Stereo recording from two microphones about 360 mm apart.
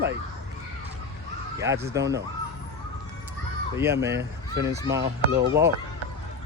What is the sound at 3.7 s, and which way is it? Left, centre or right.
Speech, centre.